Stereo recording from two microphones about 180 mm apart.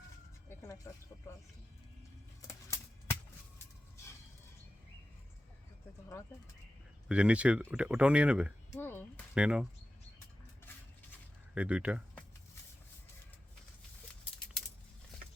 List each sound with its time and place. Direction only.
0.4 s a sound: 15° left (ahead or behind)
2.5 s a sound: 15° left (ahead or behind)
7.1 s speech: 5° right (ahead or behind)
8.8 s speech: 10° left (ahead or behind)
9.3 s speech: 5° right (ahead or behind)
11.5 s speech: 5° right (ahead or behind)